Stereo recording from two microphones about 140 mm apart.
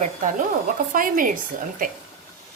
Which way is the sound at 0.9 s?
75° right (ahead or behind).